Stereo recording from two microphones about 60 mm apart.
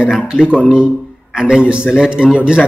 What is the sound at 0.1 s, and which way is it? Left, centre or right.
A man's voice, centre.